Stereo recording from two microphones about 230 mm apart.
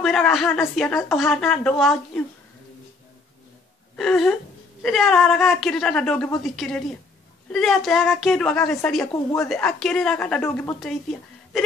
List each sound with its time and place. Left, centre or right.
0.0 s a woman's voice: centre
3.9 s a woman's voice: centre